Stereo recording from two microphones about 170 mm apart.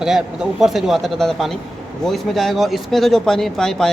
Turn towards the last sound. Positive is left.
turn(degrees=5)  # may be behind; listen again after turning